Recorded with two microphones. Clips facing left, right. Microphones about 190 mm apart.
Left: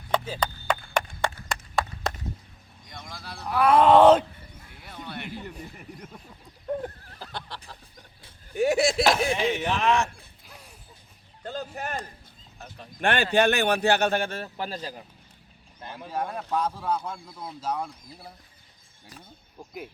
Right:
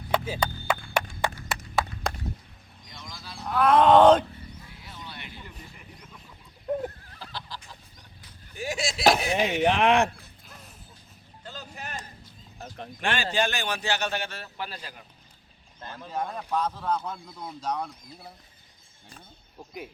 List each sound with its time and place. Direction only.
0.1 s music: 10° right (ahead or behind)
1.8 s a sound: 5° right (ahead or behind)
2.9 s a sound: 55° left (ahead or behind)
3.5 s groan: 10° left (ahead or behind)
4.7 s a sound: 55° left (ahead or behind)
7.2 s fowl: 60° left (ahead or behind)
8.5 s chop: 65° left (ahead or behind)
9.0 s chop: 45° right (ahead or behind)
10.4 s music: 10° left (ahead or behind)
11.4 s music: 55° left (ahead or behind)
13.0 s speech: 60° left (ahead or behind); by 15.0 s 40° left (ahead or behind)
15.8 s speech: 15° left (ahead or behind)